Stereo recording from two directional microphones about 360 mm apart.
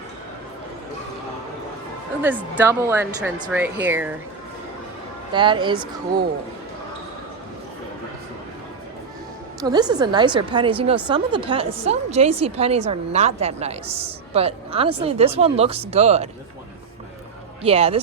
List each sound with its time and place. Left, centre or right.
2.2 s speech: centre
5.3 s a woman's voice: centre
9.6 s a woman's voice: centre
17.7 s a woman's voice: centre